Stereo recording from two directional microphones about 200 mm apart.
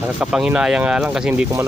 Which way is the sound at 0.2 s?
5° right (ahead or behind).